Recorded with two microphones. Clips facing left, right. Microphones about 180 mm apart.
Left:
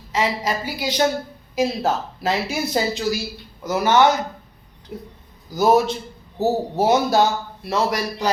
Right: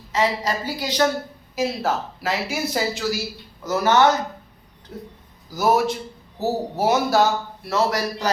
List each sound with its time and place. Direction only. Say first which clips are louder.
0.1 s a woman's voice: even; 10° left (ahead or behind)
5.5 s a woman's voice: left 3 dB; 20° left (ahead or behind)